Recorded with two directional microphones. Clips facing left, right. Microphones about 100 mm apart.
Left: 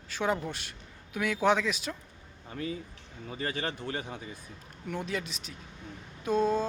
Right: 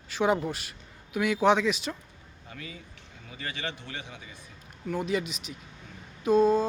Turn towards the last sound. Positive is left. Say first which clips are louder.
# right 5 dB
turn(degrees=0)  # may be behind; listen again after turning